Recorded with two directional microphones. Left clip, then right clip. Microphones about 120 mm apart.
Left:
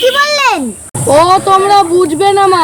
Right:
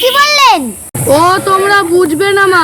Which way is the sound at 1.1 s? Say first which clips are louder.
Left 1 dB; 30° right (ahead or behind).